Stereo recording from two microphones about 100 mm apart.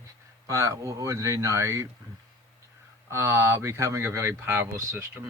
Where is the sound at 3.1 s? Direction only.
25° right (ahead or behind).